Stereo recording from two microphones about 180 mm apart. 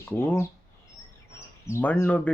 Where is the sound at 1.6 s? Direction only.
10° left (ahead or behind).